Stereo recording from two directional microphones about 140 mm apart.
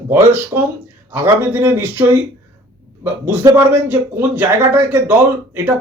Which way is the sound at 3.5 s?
15° right (ahead or behind).